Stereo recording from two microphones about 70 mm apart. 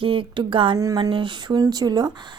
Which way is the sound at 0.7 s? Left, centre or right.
Right.